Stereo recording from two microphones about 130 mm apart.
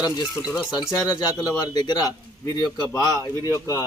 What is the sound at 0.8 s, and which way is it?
Speech, 25° left (ahead or behind).